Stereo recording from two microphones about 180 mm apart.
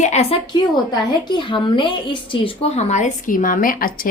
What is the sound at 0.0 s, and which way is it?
A woman's voice, 35° left (ahead or behind).